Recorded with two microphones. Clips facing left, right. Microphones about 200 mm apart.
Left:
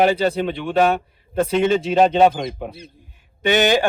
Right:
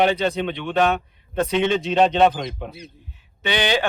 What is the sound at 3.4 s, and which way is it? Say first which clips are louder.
Speech: left 5 dB; 45° left (ahead or behind).